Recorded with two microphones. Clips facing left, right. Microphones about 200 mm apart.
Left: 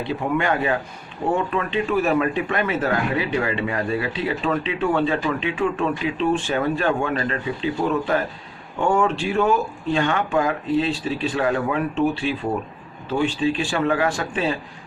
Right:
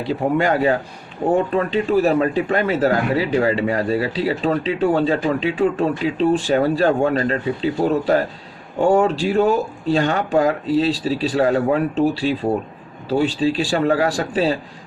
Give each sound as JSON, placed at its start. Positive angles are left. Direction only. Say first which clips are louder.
{"t": 0.0, "sound": "a man's voice", "louder": "right 4 dB", "side_deg": -35}